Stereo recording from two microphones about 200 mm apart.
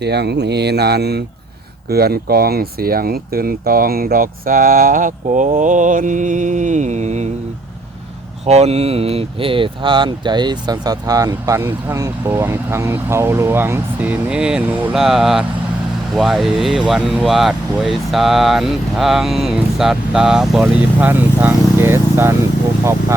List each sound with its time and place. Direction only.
0.0 s speech: 55° right (ahead or behind); by 7.3 s 35° right (ahead or behind)
8.4 s speech: 30° right (ahead or behind); by 22.4 s 10° right (ahead or behind)